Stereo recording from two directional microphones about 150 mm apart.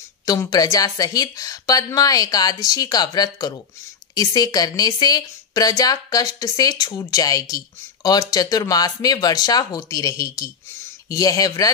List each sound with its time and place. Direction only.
0.2 s speech: 25° left (ahead or behind)